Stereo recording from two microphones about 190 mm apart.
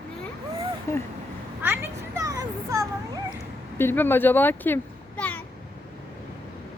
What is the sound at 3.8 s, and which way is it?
A child's voice, 10° left (ahead or behind).